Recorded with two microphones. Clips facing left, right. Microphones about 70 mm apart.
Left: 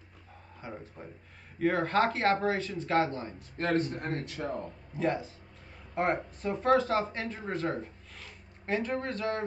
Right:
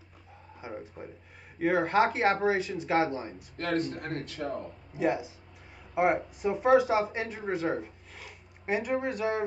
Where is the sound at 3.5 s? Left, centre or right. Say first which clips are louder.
Left 1 dB; left.